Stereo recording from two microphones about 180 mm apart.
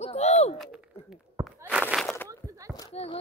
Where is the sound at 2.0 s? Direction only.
10° left (ahead or behind).